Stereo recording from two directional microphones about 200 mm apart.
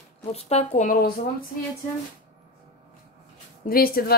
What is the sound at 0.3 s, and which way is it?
Speech, 30° left (ahead or behind).